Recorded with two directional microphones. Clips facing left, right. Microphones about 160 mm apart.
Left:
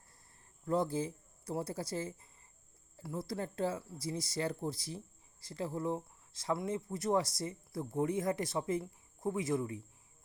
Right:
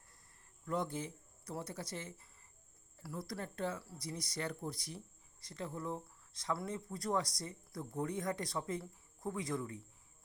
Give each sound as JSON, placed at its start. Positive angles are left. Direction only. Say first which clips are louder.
{"t": 0.6, "sound": "speech", "louder": "left 6 dB", "side_deg": 35}